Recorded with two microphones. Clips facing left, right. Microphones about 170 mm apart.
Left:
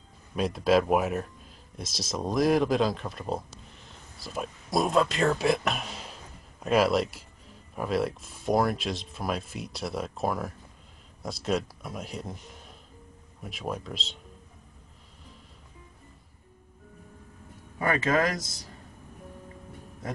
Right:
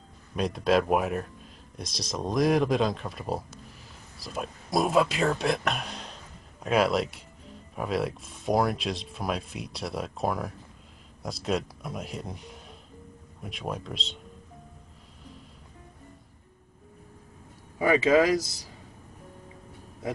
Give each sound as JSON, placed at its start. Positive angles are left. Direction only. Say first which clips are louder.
{"t": 0.4, "sound": "speech", "louder": "left 1 dB", "side_deg": 0}
{"t": 17.8, "sound": "speech", "louder": "right 4 dB", "side_deg": -5}